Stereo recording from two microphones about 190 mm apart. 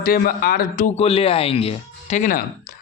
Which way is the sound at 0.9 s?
30° left (ahead or behind).